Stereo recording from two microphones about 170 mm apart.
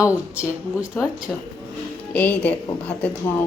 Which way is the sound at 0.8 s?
20° left (ahead or behind).